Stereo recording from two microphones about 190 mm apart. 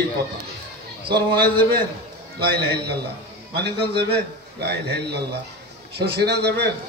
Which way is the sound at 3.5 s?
60° right (ahead or behind).